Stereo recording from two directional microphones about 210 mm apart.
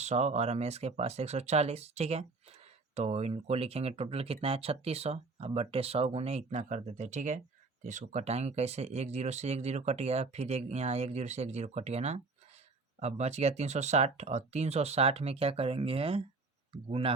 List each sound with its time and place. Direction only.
0.0 s speech: 35° right (ahead or behind)